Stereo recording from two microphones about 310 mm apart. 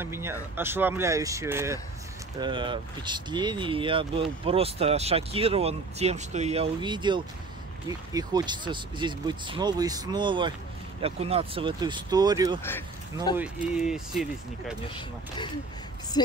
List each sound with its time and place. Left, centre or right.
0.0 s speech: centre
12.6 s speech: centre
13.4 s speech: centre
15.0 s speech: centre